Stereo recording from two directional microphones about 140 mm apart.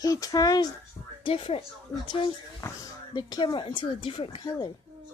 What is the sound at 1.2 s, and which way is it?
Speech, 40° left (ahead or behind).